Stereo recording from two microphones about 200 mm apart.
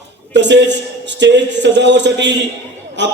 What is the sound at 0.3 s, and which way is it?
A man's voice, 60° right (ahead or behind).